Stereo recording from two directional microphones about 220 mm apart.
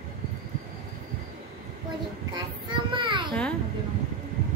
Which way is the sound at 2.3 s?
20° right (ahead or behind).